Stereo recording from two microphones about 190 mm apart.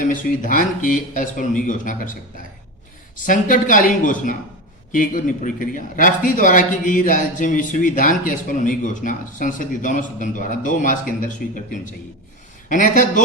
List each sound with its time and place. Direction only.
0.0 s a man's voice: 45° left (ahead or behind)
3.2 s a man's voice: 45° left (ahead or behind)